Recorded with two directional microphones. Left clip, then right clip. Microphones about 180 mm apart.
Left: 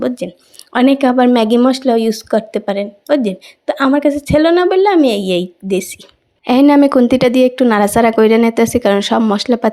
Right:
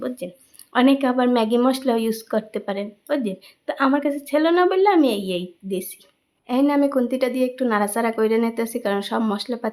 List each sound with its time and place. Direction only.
0.2 s speech: 35° left (ahead or behind)
6.4 s a woman's voice: 50° left (ahead or behind)